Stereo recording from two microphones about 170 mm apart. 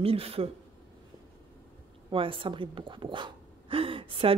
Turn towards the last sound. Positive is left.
turn(degrees=-30)  # may be behind; listen again after turning